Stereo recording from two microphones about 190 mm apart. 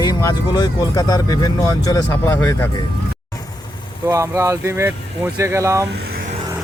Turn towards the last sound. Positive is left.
turn(degrees=-15)  # may be behind; listen again after turning